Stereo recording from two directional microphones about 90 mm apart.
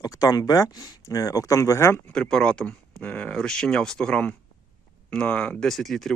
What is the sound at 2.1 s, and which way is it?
Speech, 10° left (ahead or behind).